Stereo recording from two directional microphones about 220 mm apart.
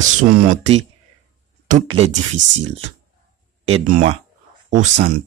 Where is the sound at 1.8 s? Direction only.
25° right (ahead or behind).